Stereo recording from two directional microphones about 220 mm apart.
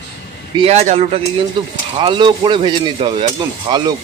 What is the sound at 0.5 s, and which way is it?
Speech, 25° right (ahead or behind).